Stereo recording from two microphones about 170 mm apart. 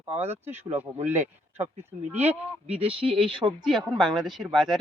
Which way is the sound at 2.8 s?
30° right (ahead or behind).